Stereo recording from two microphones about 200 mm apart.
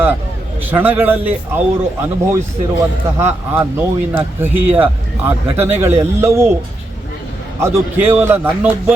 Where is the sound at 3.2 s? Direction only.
10° right (ahead or behind).